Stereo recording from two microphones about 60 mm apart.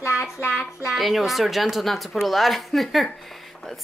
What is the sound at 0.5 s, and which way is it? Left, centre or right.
Speech, centre.